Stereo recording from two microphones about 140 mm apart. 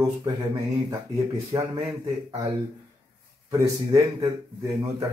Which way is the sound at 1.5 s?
30° right (ahead or behind).